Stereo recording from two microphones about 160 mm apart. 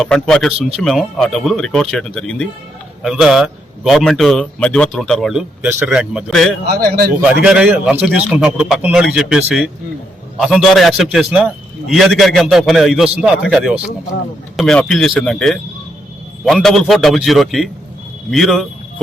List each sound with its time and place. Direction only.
0.0 s a man's voice: 5° left (ahead or behind)
6.7 s speech: 70° right (ahead or behind)
7.4 s a man's voice: 5° right (ahead or behind)